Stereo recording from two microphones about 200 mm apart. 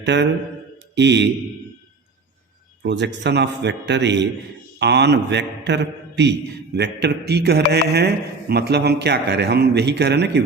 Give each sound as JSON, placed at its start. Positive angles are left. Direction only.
{"t": 0.0, "sound": "a man's voice", "side_deg": -60}
{"t": 2.8, "sound": "a man's voice", "side_deg": -60}